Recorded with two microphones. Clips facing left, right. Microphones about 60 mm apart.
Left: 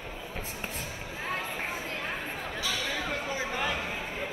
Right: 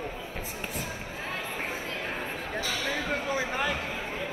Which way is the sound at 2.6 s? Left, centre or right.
Right.